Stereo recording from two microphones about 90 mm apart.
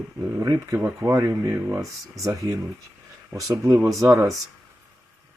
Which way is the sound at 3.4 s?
40° right (ahead or behind).